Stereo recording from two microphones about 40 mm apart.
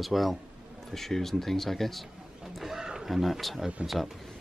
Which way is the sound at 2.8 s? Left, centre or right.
Centre.